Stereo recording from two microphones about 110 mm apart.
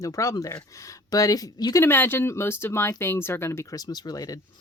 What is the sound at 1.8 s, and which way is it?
Speech, 20° left (ahead or behind).